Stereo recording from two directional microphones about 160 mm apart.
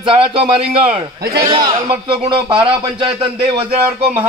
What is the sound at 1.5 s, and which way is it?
Speech, 30° right (ahead or behind).